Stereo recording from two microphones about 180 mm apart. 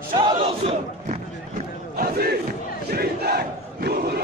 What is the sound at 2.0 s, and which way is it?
Crowd, 60° right (ahead or behind).